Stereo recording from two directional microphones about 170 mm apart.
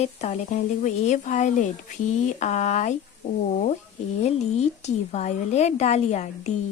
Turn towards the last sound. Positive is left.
turn(degrees=40)  # may be behind; listen again after turning